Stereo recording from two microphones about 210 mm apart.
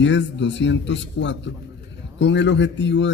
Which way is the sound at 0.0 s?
60° left (ahead or behind).